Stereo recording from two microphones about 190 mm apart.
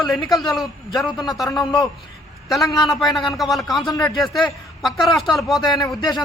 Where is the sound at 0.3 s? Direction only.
Centre (ahead or behind).